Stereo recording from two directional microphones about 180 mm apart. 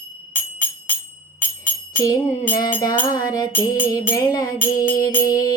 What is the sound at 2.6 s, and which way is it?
Music, 20° left (ahead or behind).